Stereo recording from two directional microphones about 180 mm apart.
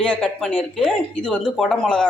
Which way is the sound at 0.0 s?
5° left (ahead or behind).